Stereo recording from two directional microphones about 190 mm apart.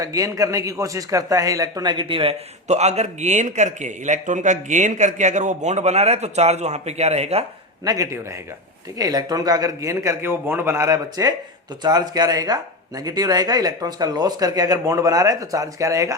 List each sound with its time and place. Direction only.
0.0 s speech: 20° right (ahead or behind); by 7.4 s 35° right (ahead or behind)
7.9 s a man's voice: 15° right (ahead or behind)